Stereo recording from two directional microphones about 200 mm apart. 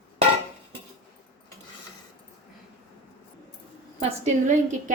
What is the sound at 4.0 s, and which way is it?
Speech, 35° right (ahead or behind).